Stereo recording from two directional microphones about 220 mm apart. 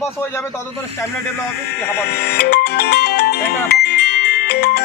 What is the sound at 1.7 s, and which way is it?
Speech, 45° left (ahead or behind).